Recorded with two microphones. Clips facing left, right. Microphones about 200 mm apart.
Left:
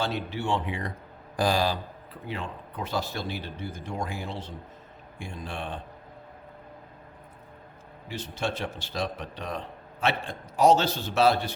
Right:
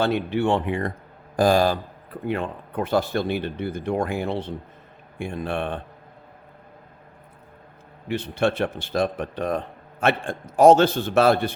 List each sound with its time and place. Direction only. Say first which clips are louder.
0.0 s a man's voice: right 8 dB; 55° right (ahead or behind)
8.0 s a man's voice: right 9 dB; 60° right (ahead or behind)